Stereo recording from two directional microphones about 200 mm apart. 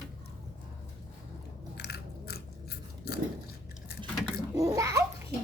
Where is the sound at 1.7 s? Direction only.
55° left (ahead or behind).